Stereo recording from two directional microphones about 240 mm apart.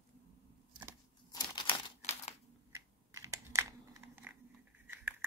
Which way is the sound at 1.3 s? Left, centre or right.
Centre.